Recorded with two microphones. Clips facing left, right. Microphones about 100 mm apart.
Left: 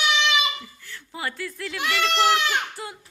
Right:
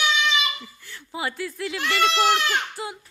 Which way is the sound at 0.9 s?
15° right (ahead or behind).